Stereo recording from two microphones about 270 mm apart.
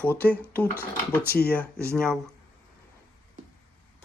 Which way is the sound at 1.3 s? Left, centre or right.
Left.